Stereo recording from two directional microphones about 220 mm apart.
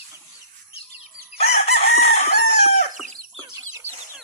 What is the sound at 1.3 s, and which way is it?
Chicken, 30° left (ahead or behind).